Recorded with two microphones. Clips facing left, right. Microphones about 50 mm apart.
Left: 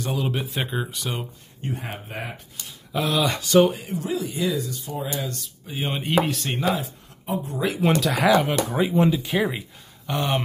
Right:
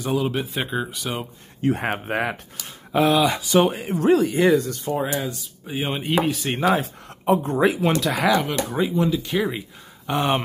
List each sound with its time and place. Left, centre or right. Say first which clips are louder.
0.0 s speech: right 3 dB; centre
1.7 s speech: right 9 dB; right
2.9 s speech: right 7 dB; right
3.2 s speech: even; centre
3.6 s speech: right 1 dB; right
4.0 s speech: right 10 dB; right
5.3 s speech: right 4 dB; centre
6.8 s speech: right 4 dB; right
7.8 s speech: even; centre
10.0 s speech: right 3 dB; right